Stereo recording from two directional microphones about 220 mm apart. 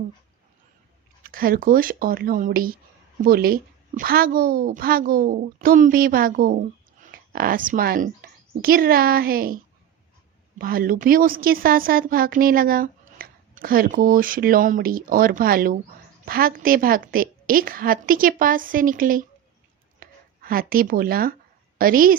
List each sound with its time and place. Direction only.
1.2 s a woman's voice: 40° right (ahead or behind)
10.6 s a woman's voice: 40° right (ahead or behind)